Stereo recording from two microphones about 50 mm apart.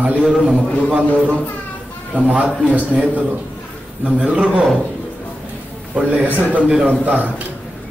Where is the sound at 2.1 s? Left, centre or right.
Right.